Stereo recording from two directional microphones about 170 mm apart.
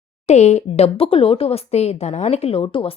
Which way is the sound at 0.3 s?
40° left (ahead or behind).